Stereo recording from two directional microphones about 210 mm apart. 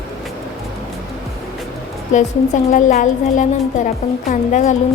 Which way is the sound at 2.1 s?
35° left (ahead or behind).